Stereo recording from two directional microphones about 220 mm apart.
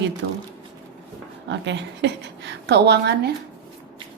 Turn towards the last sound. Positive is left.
turn(degrees=-50)  # may be behind; listen again after turning